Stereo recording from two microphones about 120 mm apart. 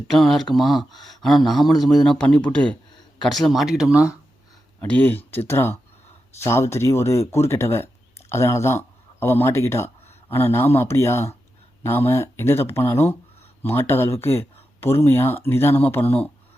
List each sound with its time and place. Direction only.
0.1 s speech: centre (ahead or behind)
4.8 s speech: 15° left (ahead or behind)